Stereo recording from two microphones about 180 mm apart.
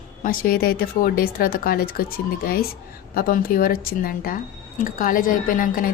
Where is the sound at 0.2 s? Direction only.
55° left (ahead or behind).